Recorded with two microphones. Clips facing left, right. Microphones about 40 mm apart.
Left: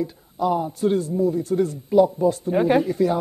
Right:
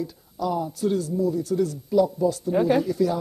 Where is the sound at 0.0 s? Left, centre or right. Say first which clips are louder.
Left 4 dB; left.